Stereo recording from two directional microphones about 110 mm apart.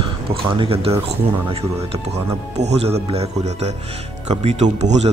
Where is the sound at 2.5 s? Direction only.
75° right (ahead or behind).